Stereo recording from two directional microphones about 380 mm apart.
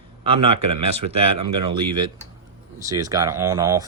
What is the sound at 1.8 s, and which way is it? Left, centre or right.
Speech, right.